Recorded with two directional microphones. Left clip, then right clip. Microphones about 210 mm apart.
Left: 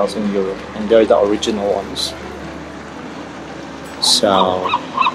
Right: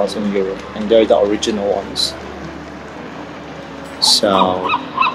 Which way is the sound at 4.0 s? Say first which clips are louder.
Even; centre (ahead or behind).